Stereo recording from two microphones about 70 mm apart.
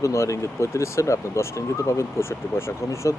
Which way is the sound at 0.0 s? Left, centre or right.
Left.